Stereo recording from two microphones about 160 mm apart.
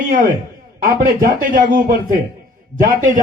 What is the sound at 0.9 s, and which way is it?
A man's voice, 60° right (ahead or behind).